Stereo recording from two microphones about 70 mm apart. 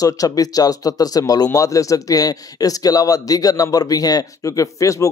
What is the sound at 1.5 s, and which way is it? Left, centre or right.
A man's voice, left.